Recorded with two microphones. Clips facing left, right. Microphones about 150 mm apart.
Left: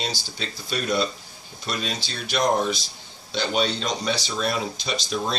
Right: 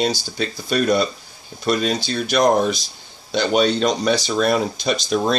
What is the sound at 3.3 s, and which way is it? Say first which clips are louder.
Speech: right 7 dB; 55° right (ahead or behind).